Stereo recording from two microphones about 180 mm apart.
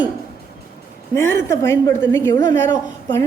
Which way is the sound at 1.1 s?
15° left (ahead or behind).